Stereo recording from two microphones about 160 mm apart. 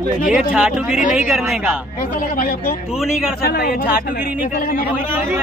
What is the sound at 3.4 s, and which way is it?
Speech, 70° left (ahead or behind).